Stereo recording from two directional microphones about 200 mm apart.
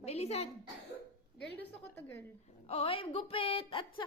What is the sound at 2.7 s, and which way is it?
A woman's voice, 25° left (ahead or behind).